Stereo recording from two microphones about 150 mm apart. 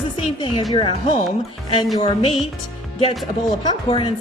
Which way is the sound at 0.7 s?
35° left (ahead or behind).